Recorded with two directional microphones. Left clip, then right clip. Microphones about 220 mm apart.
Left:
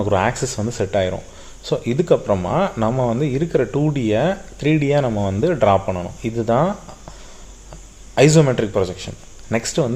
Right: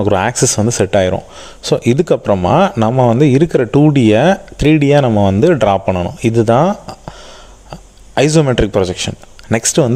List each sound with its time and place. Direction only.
0.0 s speech: 45° right (ahead or behind)
8.1 s speech: 45° right (ahead or behind)